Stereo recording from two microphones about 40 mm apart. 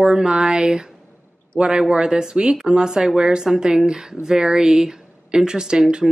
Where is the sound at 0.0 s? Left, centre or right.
Right.